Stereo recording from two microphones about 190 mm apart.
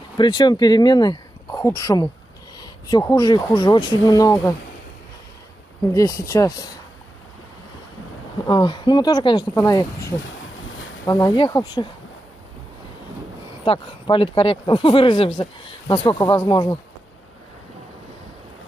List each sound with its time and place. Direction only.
0.2 s speech: 25° left (ahead or behind)
5.9 s speech: 15° left (ahead or behind)
8.5 s speech: 25° left (ahead or behind)
13.7 s speech: 25° left (ahead or behind)